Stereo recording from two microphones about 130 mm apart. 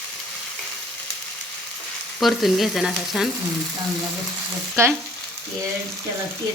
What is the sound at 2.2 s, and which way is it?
Frying, centre (ahead or behind).